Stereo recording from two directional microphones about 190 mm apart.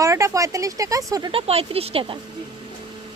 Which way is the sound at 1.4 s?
30° right (ahead or behind).